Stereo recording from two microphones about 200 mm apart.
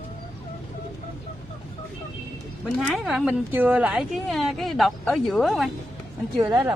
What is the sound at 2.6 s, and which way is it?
A woman's voice, centre (ahead or behind).